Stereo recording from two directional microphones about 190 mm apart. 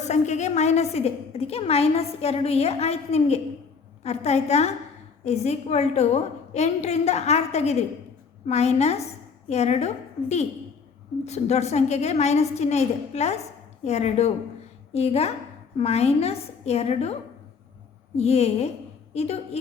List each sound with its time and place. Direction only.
0.0 s a woman's voice: 35° left (ahead or behind)
18.2 s a woman's voice: 35° left (ahead or behind)